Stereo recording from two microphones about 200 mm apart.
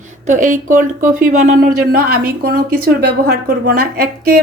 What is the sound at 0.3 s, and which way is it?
Speech, 40° right (ahead or behind).